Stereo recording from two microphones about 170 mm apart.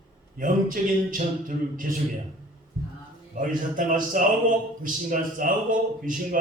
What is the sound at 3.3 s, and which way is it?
A man's voice, 50° right (ahead or behind).